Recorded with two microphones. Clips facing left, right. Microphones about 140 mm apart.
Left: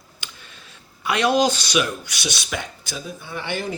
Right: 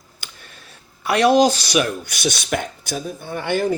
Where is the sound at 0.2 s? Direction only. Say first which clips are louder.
Even; 45° right (ahead or behind).